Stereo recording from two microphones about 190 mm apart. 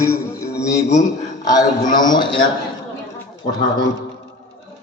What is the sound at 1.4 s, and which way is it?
Speech, 20° left (ahead or behind).